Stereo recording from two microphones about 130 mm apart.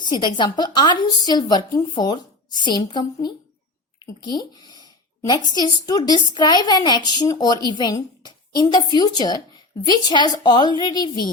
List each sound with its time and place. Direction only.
0.0 s a woman's voice: 35° left (ahead or behind)